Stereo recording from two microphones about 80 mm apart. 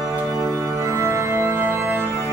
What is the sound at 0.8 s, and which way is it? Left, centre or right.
Music, right.